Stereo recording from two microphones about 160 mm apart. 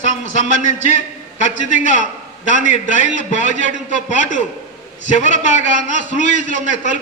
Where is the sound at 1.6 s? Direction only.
50° left (ahead or behind).